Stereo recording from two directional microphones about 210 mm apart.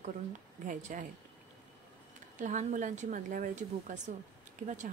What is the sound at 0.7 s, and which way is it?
Speech, 40° right (ahead or behind).